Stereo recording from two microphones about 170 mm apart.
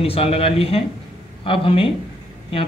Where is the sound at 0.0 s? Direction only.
35° left (ahead or behind).